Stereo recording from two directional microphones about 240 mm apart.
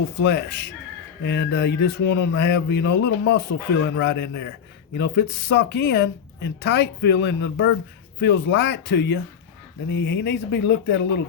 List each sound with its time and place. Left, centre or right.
0.2 s speech: left